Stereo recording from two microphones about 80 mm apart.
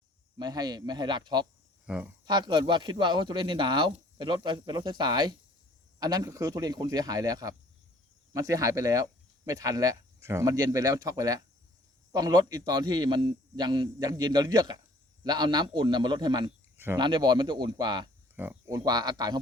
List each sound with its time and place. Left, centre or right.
0.3 s a man's voice: right
1.9 s speech: centre
2.2 s speech: right
6.0 s speech: right
10.4 s a man's voice: right
16.7 s a sound: right
17.0 s speech: right
18.9 s a man's voice: right